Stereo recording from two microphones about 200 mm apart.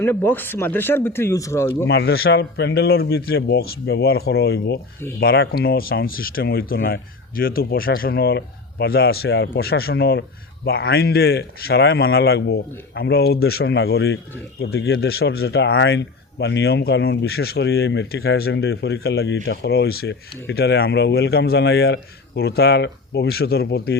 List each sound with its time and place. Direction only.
0.0 s speech: 10° left (ahead or behind)
1.9 s speech: 55° left (ahead or behind)